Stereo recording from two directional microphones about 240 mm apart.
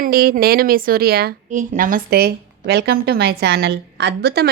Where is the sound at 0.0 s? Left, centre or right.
Right.